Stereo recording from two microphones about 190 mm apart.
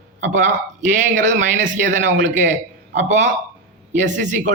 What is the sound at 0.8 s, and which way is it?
A man's voice, 40° right (ahead or behind).